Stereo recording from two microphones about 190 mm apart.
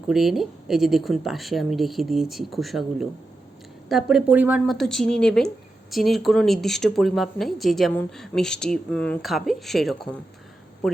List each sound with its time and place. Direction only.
0.1 s speech: centre (ahead or behind)